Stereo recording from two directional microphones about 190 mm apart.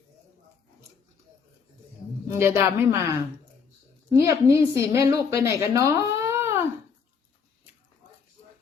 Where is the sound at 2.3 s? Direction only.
15° right (ahead or behind).